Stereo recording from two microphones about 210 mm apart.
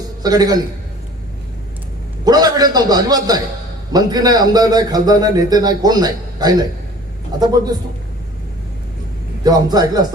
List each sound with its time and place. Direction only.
0.2 s a man's voice: 20° right (ahead or behind)
2.2 s a man's voice: 20° right (ahead or behind)
9.4 s a man's voice: 20° right (ahead or behind)